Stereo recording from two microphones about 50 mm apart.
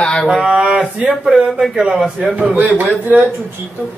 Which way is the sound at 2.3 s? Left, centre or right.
Right.